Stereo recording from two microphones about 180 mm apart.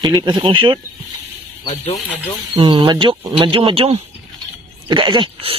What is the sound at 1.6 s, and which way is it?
Speech, 25° left (ahead or behind).